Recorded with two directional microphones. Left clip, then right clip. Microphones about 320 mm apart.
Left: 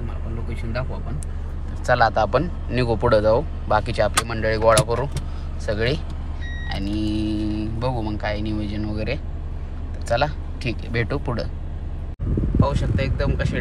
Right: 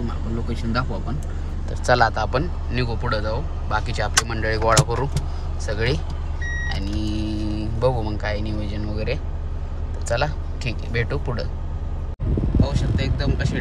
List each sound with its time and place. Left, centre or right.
1.9 s a man's voice: centre
10.1 s a man's voice: centre
12.5 s a man's voice: centre